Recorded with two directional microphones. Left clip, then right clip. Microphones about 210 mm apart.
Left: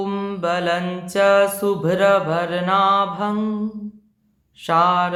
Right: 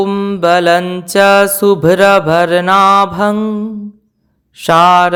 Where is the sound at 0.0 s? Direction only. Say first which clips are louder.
Right 11 dB; 40° right (ahead or behind).